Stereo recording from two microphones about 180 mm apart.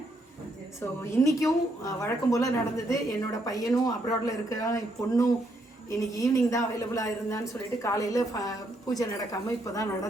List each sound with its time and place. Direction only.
0.8 s a woman's voice: 15° left (ahead or behind)